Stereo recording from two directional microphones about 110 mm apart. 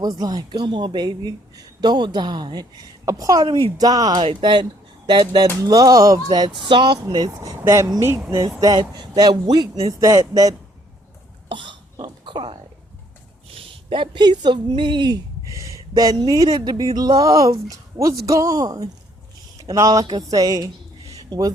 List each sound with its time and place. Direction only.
0.0 s a woman's voice: 35° right (ahead or behind)
7.6 s a woman's voice: 25° right (ahead or behind)
11.4 s hiccup: 50° right (ahead or behind)
13.5 s a woman's voice: 55° right (ahead or behind); by 20.7 s 35° right (ahead or behind)
21.1 s a sound: 35° right (ahead or behind)